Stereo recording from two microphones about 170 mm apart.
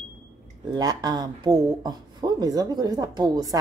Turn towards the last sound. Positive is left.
turn(degrees=-20)  # may be behind; listen again after turning